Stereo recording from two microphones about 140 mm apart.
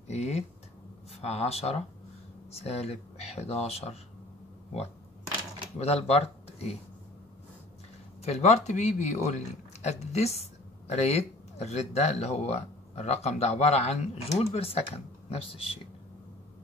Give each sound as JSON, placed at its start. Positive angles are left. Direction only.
{"t": 0.1, "sound": "a sound", "side_deg": 50}
{"t": 1.2, "sound": "speech", "side_deg": 50}
{"t": 5.8, "sound": "speech", "side_deg": 50}
{"t": 8.2, "sound": "speech", "side_deg": 50}